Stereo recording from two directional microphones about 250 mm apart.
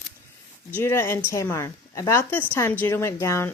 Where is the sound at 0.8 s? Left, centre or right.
Centre.